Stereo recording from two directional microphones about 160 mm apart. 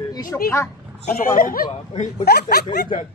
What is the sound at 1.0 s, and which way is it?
Speech, 60° left (ahead or behind).